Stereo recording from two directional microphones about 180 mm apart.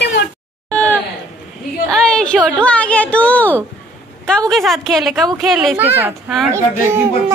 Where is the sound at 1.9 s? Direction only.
5° left (ahead or behind).